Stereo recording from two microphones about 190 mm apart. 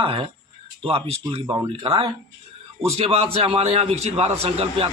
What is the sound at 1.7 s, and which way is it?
A man's voice, 30° right (ahead or behind).